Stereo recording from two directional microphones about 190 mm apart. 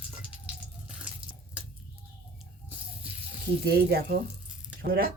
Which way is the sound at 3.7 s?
55° right (ahead or behind).